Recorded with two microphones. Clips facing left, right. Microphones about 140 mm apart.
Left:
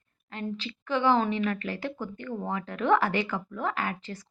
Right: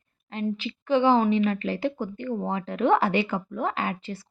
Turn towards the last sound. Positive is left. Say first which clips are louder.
# right 3 dB
turn(degrees=-20)  # may be behind; listen again after turning